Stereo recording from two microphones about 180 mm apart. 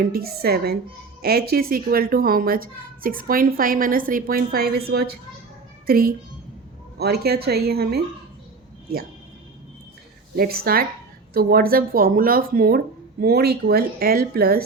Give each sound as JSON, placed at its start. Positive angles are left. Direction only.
{"t": 0.1, "sound": "a child's voice", "side_deg": -60}
{"t": 10.3, "sound": "speech", "side_deg": -55}